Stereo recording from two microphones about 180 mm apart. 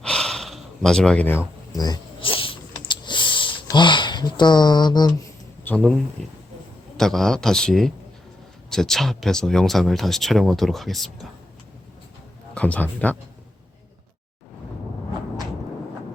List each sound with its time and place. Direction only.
0.0 s gasp: 5° left (ahead or behind)
1.7 s a sound: 20° left (ahead or behind)
5.6 s speech: 5° left (ahead or behind)
12.5 s speech: 10° left (ahead or behind)